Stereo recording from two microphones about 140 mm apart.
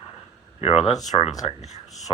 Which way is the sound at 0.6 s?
45° left (ahead or behind).